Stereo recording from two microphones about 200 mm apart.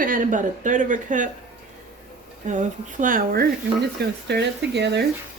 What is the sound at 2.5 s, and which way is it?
Speech, 40° right (ahead or behind).